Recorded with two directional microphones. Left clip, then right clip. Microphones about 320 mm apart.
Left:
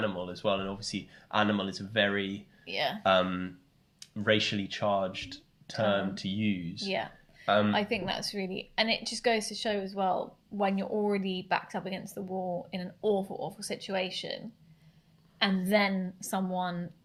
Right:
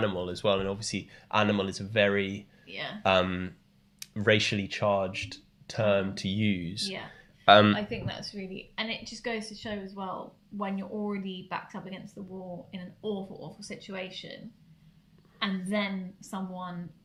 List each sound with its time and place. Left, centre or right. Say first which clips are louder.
0.0 s speech: right 3 dB; right
2.6 s speech: left 7 dB; centre
3.0 s speech: right 2 dB; right
6.8 s a woman's voice: left 7 dB; centre
7.4 s speech: right 8 dB; right
7.7 s a woman's voice: left 2 dB; centre